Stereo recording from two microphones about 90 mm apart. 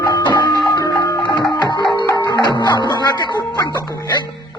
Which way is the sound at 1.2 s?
60° left (ahead or behind).